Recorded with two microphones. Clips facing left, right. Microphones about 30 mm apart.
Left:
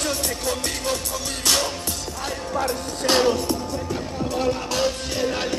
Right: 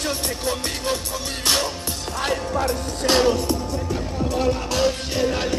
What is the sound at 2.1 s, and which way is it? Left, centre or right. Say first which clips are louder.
Music: right 11 dB; right.